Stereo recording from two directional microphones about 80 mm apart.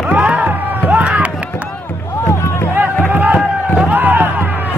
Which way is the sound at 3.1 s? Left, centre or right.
Centre.